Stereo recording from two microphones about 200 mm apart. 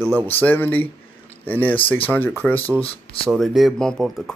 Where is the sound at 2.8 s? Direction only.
30° left (ahead or behind).